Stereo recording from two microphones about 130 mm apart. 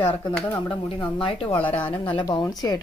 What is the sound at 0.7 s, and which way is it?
Speech, 45° left (ahead or behind).